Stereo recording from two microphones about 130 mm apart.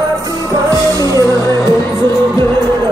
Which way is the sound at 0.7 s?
25° right (ahead or behind).